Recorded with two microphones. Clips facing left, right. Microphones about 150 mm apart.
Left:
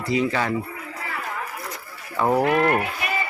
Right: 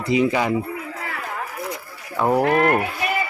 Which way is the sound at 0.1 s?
15° right (ahead or behind).